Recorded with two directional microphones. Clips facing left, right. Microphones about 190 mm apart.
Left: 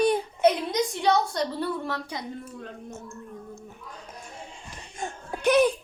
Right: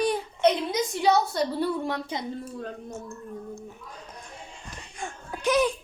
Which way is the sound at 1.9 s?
20° right (ahead or behind).